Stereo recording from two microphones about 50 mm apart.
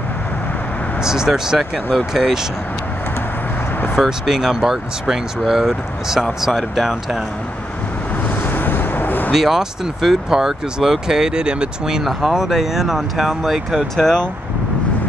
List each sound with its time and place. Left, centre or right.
1.0 s speech: centre
3.9 s speech: centre
8.5 s vehicle: left
9.3 s speech: centre
12.0 s speech: centre